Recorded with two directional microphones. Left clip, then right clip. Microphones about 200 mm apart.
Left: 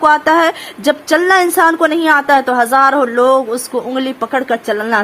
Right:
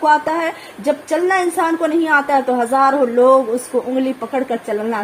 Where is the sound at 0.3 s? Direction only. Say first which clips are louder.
Left 8 dB; 25° left (ahead or behind).